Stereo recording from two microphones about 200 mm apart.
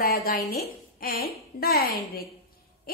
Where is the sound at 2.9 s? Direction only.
50° left (ahead or behind).